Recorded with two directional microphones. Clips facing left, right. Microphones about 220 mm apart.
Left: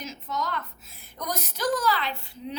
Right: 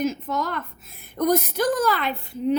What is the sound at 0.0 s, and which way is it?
A woman's voice, 55° right (ahead or behind).